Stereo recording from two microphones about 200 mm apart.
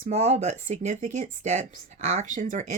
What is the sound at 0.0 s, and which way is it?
Speech, 35° right (ahead or behind).